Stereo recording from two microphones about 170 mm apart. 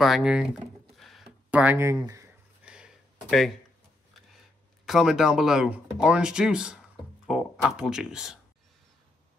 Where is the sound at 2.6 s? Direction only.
5° right (ahead or behind).